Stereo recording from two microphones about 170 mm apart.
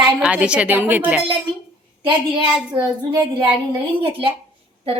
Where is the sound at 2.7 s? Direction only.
25° right (ahead or behind).